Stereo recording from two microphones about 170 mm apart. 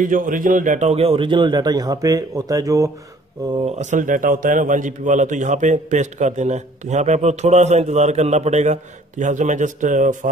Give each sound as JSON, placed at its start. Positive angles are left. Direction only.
{"t": 0.0, "sound": "a man's voice", "side_deg": -50}
{"t": 3.5, "sound": "a man's voice", "side_deg": -40}